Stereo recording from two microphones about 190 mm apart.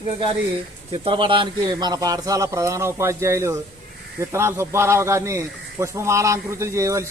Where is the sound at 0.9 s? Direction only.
30° right (ahead or behind).